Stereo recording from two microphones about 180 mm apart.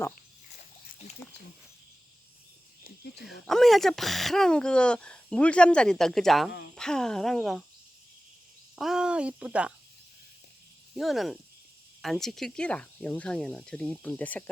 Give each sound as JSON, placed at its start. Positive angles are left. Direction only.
{"t": 2.8, "sound": "speech", "side_deg": 60}
{"t": 3.4, "sound": "speech", "side_deg": 0}
{"t": 8.7, "sound": "speech", "side_deg": -5}
{"t": 10.9, "sound": "speech", "side_deg": 0}